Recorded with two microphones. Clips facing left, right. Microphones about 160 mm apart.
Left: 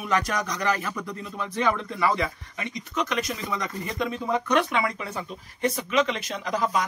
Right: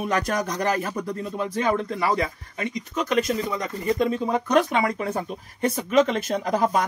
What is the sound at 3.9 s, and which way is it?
Speech, 35° right (ahead or behind).